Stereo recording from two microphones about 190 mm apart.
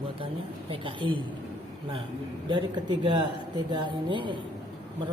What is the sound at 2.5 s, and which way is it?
A woman's voice, 25° right (ahead or behind).